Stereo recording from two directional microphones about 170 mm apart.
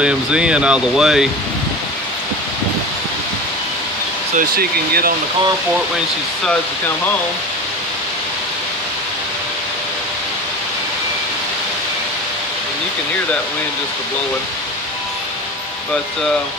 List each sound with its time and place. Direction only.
0.0 s speech: 5° right (ahead or behind)
4.4 s speech: 60° right (ahead or behind)